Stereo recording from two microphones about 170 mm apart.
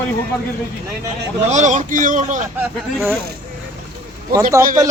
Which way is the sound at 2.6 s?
5° right (ahead or behind).